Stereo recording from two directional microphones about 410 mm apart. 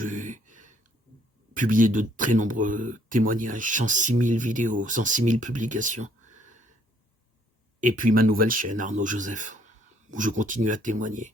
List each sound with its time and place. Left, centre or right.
0.0 s a sound: centre
1.5 s speech: centre
7.8 s speech: centre